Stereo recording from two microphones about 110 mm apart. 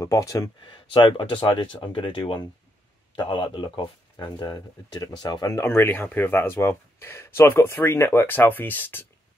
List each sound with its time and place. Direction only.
0.0 s speech: 30° left (ahead or behind)
0.6 s speech: 50° left (ahead or behind)
5.6 s speech: 20° left (ahead or behind)